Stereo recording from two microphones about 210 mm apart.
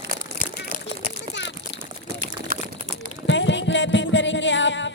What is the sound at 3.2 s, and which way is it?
Music, 60° left (ahead or behind).